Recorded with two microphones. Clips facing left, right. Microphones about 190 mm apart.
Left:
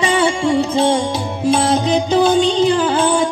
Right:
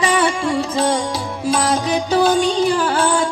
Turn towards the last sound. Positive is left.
turn(degrees=20)  # may be behind; listen again after turning